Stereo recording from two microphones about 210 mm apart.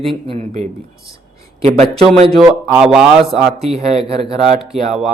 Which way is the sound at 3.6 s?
30° right (ahead or behind).